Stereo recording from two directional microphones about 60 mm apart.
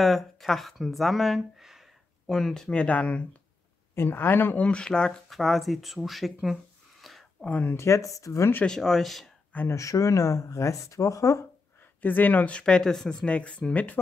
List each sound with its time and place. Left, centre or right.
0.0 s speech: centre
2.3 s speech: centre
2.7 s speech: left
3.9 s speech: left
4.6 s speech: centre
5.3 s speech: centre
7.4 s speech: left
7.7 s speech: left
8.6 s speech: centre
9.7 s speech: left
12.0 s speech: left